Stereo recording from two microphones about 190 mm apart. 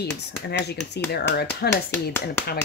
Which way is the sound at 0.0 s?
60° left (ahead or behind).